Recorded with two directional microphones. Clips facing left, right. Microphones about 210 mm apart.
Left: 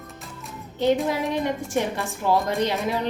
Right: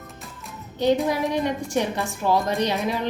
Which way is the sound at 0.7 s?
15° right (ahead or behind).